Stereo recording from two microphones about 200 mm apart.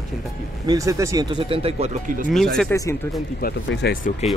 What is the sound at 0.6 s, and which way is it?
Speech, 15° right (ahead or behind).